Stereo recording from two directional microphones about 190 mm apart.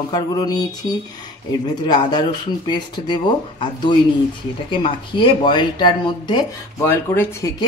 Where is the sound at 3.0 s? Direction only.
25° left (ahead or behind).